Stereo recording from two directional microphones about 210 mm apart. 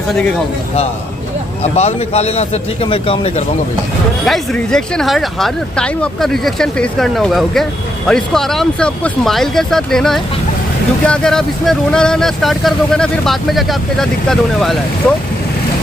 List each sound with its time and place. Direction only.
0.1 s speech: 5° left (ahead or behind)
1.6 s speech: 30° left (ahead or behind)
4.3 s speech: 5° left (ahead or behind)